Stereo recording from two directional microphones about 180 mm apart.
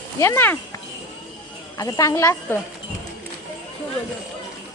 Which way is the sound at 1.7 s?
20° left (ahead or behind).